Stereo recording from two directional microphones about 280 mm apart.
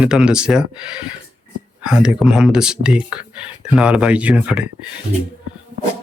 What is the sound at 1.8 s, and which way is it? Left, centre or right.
Speech, centre.